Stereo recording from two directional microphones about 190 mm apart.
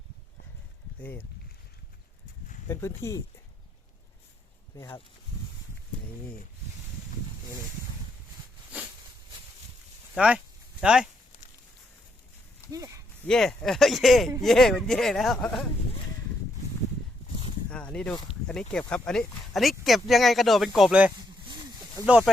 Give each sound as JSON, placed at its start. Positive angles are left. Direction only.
{"t": 2.6, "sound": "speech", "side_deg": 15}
{"t": 4.7, "sound": "speech", "side_deg": 15}
{"t": 10.2, "sound": "a sound", "side_deg": -5}
{"t": 12.7, "sound": "speech", "side_deg": -15}
{"t": 13.2, "sound": "speech", "side_deg": 5}
{"t": 17.7, "sound": "a sound", "side_deg": 5}
{"t": 18.7, "sound": "speech", "side_deg": 5}